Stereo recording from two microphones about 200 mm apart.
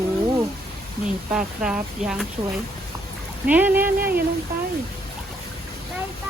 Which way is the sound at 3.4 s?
10° right (ahead or behind).